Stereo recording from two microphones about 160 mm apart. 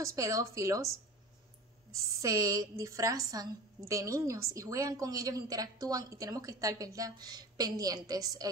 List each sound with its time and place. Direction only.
0.0 s a woman's voice: 20° right (ahead or behind)